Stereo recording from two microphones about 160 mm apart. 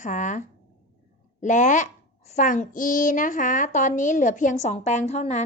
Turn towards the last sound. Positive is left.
turn(degrees=45)  # may be behind; listen again after turning